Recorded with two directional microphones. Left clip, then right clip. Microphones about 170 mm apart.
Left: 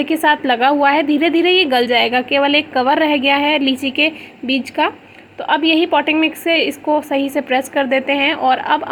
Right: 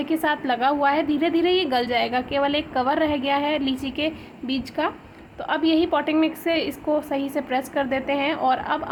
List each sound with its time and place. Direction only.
0.0 s a woman's voice: 25° left (ahead or behind)